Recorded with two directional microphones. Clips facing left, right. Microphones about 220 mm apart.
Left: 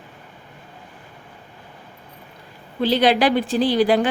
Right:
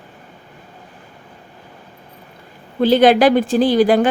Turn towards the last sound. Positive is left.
turn(degrees=-45)  # may be behind; listen again after turning